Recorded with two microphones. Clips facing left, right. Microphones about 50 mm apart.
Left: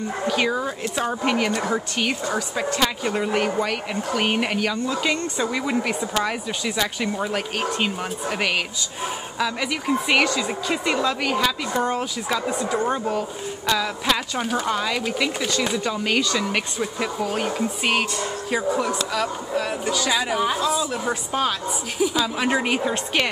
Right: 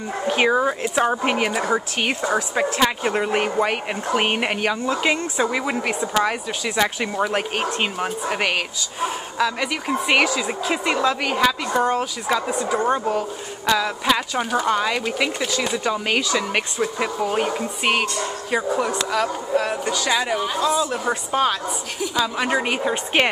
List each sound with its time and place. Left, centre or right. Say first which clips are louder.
0.3 s speech: right 6 dB; right; by 22.9 s centre